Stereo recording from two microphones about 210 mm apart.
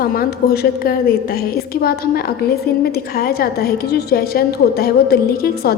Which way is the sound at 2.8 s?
45° left (ahead or behind).